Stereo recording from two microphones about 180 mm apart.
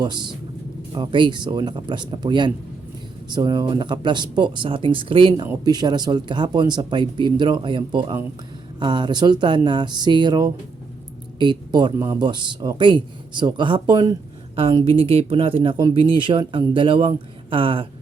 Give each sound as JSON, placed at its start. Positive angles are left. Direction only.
{"t": 0.0, "sound": "speech", "side_deg": -25}